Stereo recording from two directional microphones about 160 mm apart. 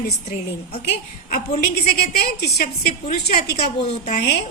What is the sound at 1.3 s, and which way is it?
A woman's voice, 65° left (ahead or behind).